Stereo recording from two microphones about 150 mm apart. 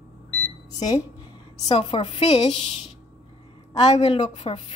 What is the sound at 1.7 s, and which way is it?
A woman's voice, 45° left (ahead or behind).